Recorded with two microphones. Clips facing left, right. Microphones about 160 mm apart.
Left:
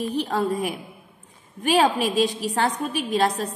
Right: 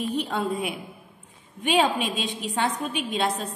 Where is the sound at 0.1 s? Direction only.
40° left (ahead or behind).